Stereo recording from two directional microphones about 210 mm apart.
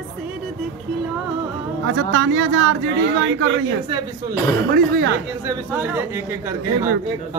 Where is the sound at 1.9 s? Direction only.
60° right (ahead or behind).